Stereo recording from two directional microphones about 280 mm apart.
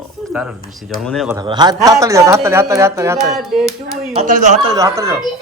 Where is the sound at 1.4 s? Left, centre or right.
Centre.